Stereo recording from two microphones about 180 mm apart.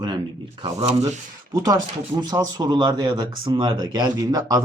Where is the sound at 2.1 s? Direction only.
20° right (ahead or behind).